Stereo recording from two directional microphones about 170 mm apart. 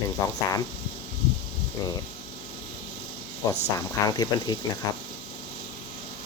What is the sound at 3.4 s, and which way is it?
Speech, 15° left (ahead or behind).